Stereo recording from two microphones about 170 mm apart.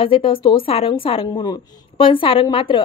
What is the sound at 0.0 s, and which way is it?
A woman's voice, 30° left (ahead or behind).